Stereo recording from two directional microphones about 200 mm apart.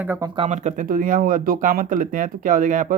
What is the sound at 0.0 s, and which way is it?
Speech, 10° right (ahead or behind).